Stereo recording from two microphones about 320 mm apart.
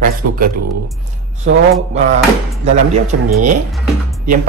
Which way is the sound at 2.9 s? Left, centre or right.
Right.